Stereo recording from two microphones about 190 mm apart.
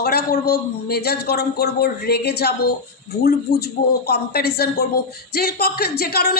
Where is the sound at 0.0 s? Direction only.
55° left (ahead or behind).